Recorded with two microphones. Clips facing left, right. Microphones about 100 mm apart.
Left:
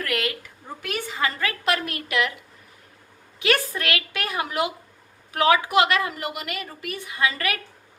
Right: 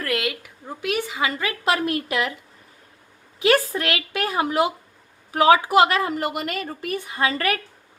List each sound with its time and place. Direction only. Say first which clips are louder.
0.0 s a sound: right 2 dB; 25° right (ahead or behind)
0.8 s a woman's voice: right 3 dB; 10° right (ahead or behind); by 2.3 s 25° right (ahead or behind)
3.4 s a woman's voice: right 4 dB; 25° right (ahead or behind)